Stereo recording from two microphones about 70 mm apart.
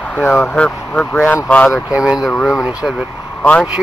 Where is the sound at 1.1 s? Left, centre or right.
Left.